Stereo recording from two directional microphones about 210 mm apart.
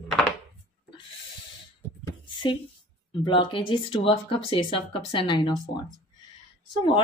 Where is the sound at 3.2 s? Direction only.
25° left (ahead or behind).